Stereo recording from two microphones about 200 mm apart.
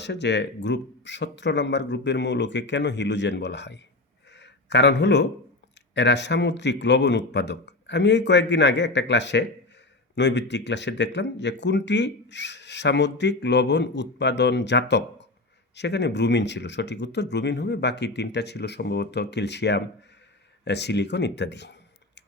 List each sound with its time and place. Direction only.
0.0 s speech: 60° left (ahead or behind)
4.3 s a sound: 60° left (ahead or behind)
5.9 s speech: 60° left (ahead or behind)